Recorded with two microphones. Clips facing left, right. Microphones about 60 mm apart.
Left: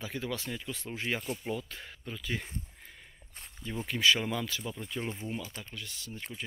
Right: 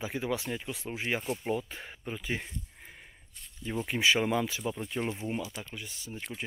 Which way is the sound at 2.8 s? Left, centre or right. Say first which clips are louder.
Right 2 dB; centre.